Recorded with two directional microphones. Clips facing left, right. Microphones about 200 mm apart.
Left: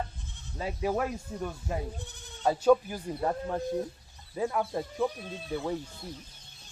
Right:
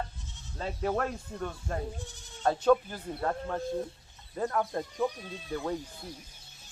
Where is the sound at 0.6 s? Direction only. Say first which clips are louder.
Left 1 dB; 10° left (ahead or behind).